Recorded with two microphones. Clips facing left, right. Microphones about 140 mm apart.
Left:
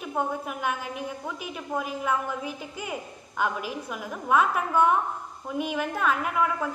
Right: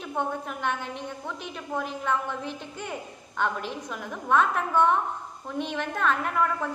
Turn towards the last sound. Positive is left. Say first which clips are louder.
# even
turn(degrees=5)  # may be behind; listen again after turning